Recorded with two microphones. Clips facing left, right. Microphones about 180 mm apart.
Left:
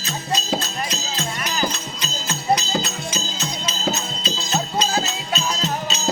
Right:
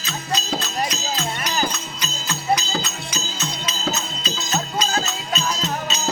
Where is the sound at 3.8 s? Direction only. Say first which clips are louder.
Left 2 dB; 30° left (ahead or behind).